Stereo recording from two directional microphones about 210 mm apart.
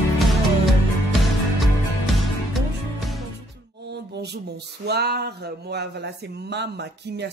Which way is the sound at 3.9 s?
50° right (ahead or behind).